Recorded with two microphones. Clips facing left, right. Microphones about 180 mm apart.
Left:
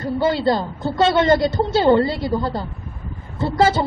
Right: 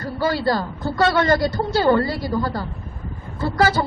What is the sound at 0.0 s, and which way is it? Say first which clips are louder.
A man's voice: left 3 dB; 25° left (ahead or behind).